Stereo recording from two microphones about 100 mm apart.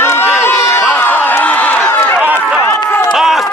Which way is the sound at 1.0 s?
15° left (ahead or behind).